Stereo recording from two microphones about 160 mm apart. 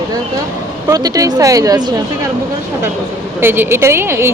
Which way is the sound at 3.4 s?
15° right (ahead or behind).